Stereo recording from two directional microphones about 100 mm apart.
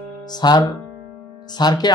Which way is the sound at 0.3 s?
45° left (ahead or behind).